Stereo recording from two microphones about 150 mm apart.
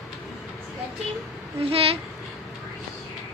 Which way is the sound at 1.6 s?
40° right (ahead or behind).